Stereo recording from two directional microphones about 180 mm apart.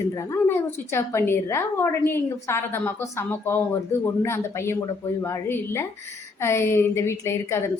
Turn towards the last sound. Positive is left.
turn(degrees=15)  # may be behind; listen again after turning